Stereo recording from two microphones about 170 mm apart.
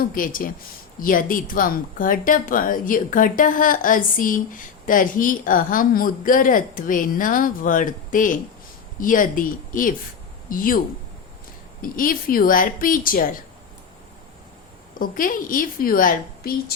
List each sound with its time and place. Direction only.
0.0 s a woman's voice: 55° left (ahead or behind)
14.9 s a woman's voice: 55° left (ahead or behind)